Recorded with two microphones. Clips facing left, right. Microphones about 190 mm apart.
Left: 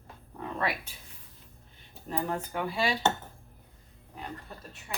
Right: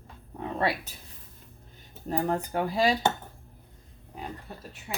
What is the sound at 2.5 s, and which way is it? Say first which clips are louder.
Speech: right 5 dB; 40° right (ahead or behind).